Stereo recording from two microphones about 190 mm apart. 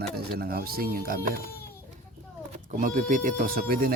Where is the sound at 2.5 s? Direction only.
45° right (ahead or behind).